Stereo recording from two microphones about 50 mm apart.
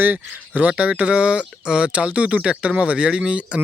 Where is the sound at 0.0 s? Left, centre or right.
Right.